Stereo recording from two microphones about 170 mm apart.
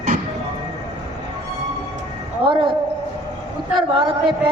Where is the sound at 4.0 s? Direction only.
30° right (ahead or behind).